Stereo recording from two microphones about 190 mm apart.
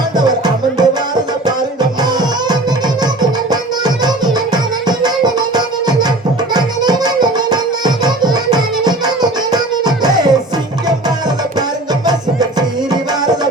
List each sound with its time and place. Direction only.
0.3 s music: 20° right (ahead or behind)
12.0 s music: 20° right (ahead or behind)